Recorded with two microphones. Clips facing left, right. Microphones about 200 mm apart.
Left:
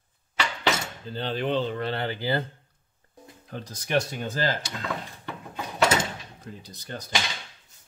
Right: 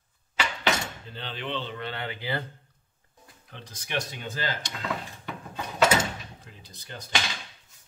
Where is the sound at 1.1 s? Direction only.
40° left (ahead or behind).